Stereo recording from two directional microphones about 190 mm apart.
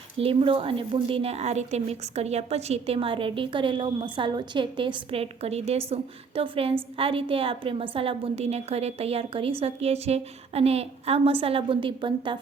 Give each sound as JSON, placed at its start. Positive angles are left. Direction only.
{"t": 0.2, "sound": "a woman's voice", "side_deg": -30}